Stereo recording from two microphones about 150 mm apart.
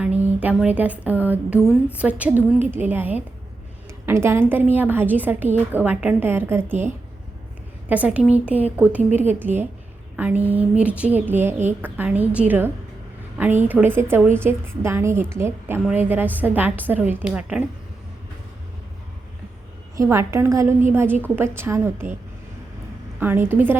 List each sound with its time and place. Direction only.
0.0 s a woman's voice: 10° right (ahead or behind)
7.9 s a woman's voice: 10° right (ahead or behind)
20.0 s a woman's voice: 20° right (ahead or behind)
23.2 s a woman's voice: 15° right (ahead or behind)